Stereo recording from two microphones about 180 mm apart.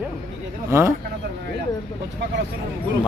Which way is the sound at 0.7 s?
15° right (ahead or behind).